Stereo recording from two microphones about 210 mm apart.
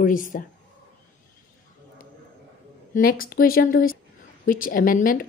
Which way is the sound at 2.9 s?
45° left (ahead or behind).